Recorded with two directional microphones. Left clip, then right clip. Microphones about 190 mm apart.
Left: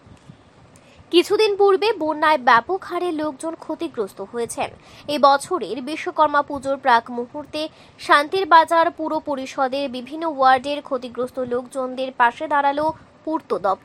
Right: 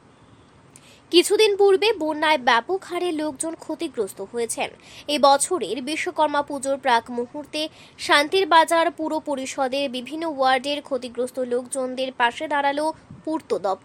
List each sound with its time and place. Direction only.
1.1 s a woman's voice: centre (ahead or behind)